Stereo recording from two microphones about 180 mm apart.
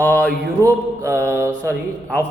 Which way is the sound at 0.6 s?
15° right (ahead or behind).